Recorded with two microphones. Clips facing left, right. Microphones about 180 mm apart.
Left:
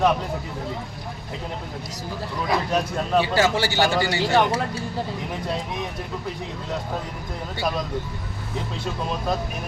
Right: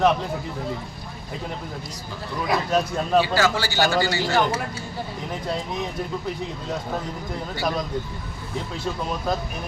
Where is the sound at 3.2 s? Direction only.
25° left (ahead or behind).